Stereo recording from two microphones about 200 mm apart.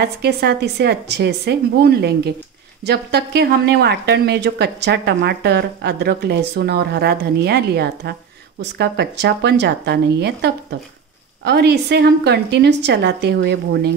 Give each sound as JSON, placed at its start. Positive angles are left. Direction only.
{"t": 0.0, "sound": "speech", "side_deg": -55}